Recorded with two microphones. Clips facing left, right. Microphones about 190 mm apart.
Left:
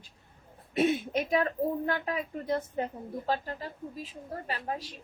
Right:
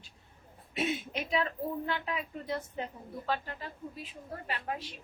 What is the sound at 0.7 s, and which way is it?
A woman's voice, 50° left (ahead or behind).